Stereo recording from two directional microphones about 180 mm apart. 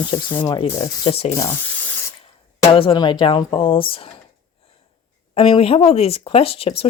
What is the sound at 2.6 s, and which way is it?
Speech, 30° left (ahead or behind).